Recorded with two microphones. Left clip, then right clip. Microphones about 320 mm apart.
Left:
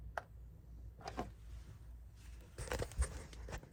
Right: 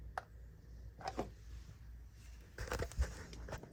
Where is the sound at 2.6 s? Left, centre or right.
Left.